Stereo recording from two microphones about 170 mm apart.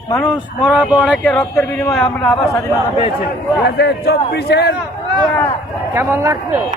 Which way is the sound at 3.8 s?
75° left (ahead or behind).